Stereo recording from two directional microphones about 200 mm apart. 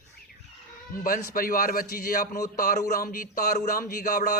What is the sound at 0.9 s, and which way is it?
A man's voice, 45° left (ahead or behind).